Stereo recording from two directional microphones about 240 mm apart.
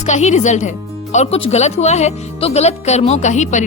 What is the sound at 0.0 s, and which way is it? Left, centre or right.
A woman's voice, left.